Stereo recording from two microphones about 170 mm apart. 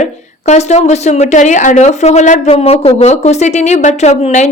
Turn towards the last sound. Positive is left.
turn(degrees=40)  # may be behind; listen again after turning